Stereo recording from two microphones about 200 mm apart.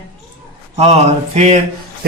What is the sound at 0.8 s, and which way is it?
Speech, 30° right (ahead or behind).